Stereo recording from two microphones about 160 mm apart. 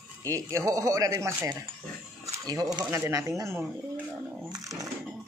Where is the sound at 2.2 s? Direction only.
25° right (ahead or behind).